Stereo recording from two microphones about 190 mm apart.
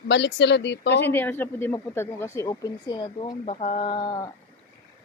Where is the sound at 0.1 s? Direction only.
65° left (ahead or behind).